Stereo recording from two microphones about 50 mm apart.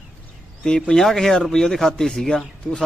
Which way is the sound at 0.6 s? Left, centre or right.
Centre.